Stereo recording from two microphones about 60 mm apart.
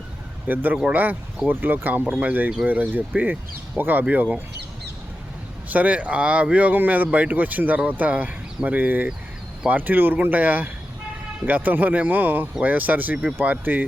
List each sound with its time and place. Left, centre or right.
0.4 s speech: right
5.7 s speech: right